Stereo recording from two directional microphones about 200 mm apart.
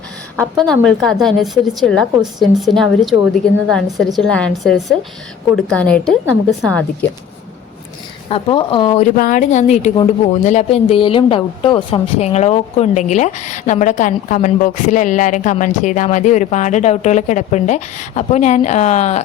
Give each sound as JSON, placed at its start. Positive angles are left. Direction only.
{"t": 0.9, "sound": "a woman's voice", "side_deg": 0}
{"t": 8.3, "sound": "speech", "side_deg": 25}
{"t": 9.0, "sound": "speech", "side_deg": 45}